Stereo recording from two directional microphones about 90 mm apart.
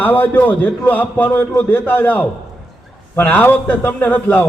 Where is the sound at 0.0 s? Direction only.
20° left (ahead or behind).